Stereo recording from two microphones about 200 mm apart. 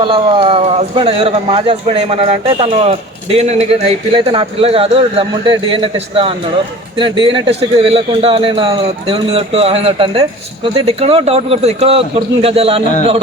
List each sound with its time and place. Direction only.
0.0 s a man's voice: 25° right (ahead or behind)